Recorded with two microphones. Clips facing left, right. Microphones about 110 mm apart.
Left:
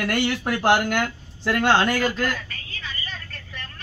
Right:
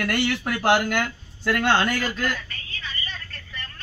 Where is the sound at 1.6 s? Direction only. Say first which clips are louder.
Left 3 dB; 5° left (ahead or behind).